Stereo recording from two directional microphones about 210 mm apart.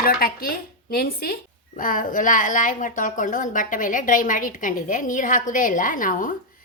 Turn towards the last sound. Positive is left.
turn(degrees=40)  # may be behind; listen again after turning